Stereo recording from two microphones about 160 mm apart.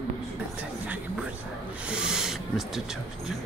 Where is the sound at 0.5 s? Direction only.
10° right (ahead or behind).